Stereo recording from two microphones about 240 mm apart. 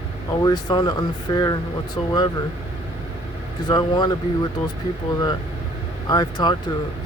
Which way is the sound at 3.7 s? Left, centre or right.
Centre.